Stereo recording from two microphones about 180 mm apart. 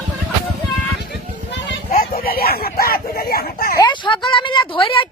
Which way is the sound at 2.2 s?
55° left (ahead or behind).